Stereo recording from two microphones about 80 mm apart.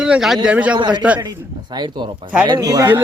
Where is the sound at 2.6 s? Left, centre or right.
Right.